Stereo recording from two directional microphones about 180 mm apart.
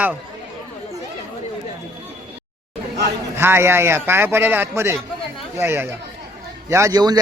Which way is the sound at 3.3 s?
15° right (ahead or behind).